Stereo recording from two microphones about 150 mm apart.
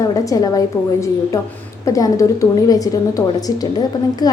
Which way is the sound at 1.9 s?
20° left (ahead or behind).